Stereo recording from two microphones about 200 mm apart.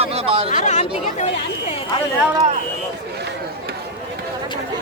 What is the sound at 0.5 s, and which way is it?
Speech, 35° left (ahead or behind).